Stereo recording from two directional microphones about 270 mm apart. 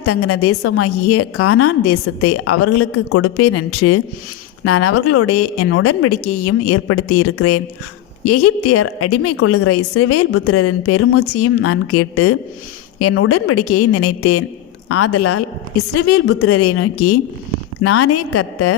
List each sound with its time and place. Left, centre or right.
0.0 s a woman's voice: left